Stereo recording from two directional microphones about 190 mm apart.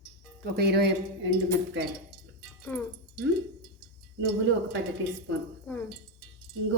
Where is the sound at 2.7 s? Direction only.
10° left (ahead or behind).